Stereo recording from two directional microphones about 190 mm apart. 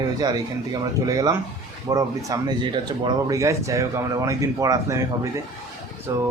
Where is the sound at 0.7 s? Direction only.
20° right (ahead or behind).